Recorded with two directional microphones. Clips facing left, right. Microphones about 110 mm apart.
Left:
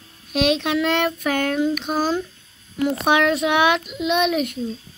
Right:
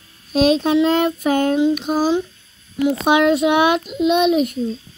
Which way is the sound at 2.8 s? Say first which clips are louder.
Right 3 dB; 25° right (ahead or behind).